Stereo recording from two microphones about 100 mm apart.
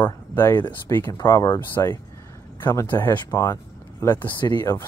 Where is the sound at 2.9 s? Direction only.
20° left (ahead or behind).